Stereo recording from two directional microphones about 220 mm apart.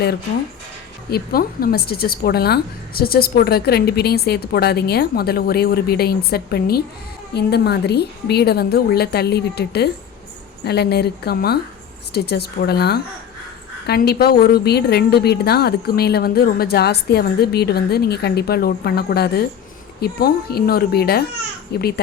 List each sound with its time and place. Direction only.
1.1 s a woman's voice: 45° left (ahead or behind)